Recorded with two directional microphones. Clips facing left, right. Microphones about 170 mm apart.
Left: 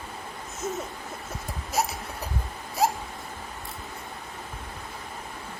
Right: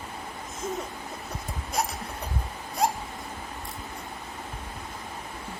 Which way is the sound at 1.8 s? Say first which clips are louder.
Left 2 dB; 5° left (ahead or behind).